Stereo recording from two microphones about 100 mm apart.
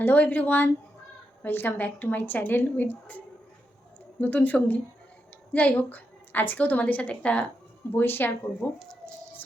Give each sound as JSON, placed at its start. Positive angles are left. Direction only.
{"t": 0.0, "sound": "a woman's voice", "side_deg": 20}
{"t": 4.2, "sound": "a woman's voice", "side_deg": 15}